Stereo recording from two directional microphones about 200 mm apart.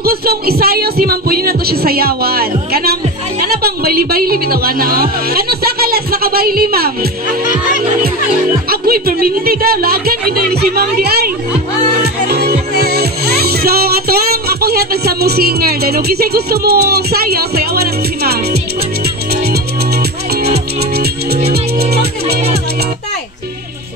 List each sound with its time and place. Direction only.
0.0 s speech: 50° right (ahead or behind)
8.6 s speech: 50° right (ahead or behind)
12.0 s music: 50° right (ahead or behind)